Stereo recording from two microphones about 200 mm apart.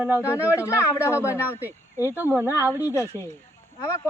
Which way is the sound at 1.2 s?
10° right (ahead or behind).